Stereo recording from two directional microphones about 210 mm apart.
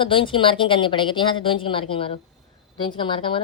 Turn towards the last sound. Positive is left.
turn(degrees=25)  # may be behind; listen again after turning